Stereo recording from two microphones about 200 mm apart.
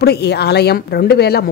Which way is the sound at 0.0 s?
55° left (ahead or behind).